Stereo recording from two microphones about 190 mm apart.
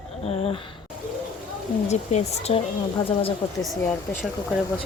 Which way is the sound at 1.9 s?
35° left (ahead or behind).